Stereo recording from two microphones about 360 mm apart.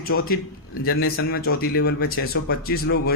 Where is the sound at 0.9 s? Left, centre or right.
Left.